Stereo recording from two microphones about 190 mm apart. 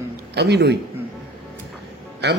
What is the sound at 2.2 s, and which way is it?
Speech, 60° right (ahead or behind).